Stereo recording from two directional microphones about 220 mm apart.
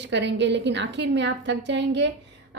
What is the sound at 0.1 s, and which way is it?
A woman's voice, 55° right (ahead or behind).